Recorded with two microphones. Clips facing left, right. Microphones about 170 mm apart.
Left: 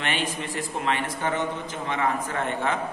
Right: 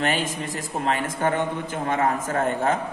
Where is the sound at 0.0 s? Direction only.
40° right (ahead or behind).